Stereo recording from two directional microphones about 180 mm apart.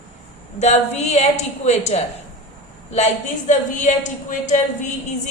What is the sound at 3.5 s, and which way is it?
A woman's voice, 40° left (ahead or behind).